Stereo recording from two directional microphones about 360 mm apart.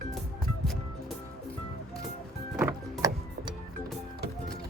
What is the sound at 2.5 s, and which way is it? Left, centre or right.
Music, centre.